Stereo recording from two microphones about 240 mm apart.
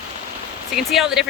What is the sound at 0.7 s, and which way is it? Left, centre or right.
Speech, centre.